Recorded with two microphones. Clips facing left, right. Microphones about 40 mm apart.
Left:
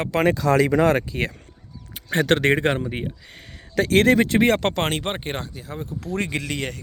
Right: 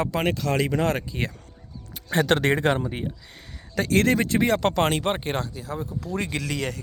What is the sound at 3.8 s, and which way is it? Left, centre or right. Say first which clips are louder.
Speech: left 4 dB; left.